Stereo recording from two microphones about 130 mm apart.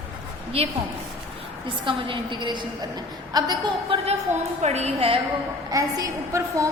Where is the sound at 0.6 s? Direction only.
50° right (ahead or behind).